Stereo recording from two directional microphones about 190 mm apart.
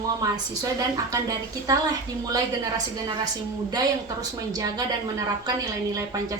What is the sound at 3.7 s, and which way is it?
A woman's voice, 20° right (ahead or behind).